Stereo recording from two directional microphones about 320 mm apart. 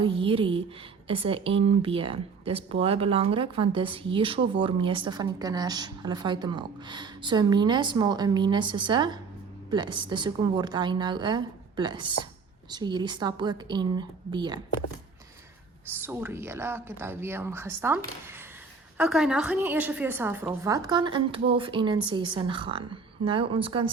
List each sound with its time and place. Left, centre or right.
0.0 s a woman's voice: centre
16.0 s a woman's voice: centre